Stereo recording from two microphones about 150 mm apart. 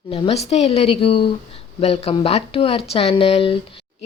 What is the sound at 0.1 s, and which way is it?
A woman's voice, 40° left (ahead or behind).